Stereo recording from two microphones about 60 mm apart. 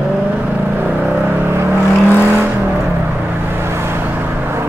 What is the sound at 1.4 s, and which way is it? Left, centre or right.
Vehicle, right.